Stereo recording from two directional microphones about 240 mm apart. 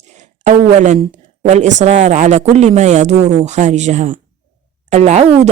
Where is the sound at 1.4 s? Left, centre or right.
Right.